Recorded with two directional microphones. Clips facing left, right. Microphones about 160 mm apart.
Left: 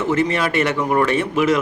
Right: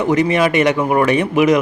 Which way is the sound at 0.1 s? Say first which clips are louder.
Right 5 dB; 15° right (ahead or behind).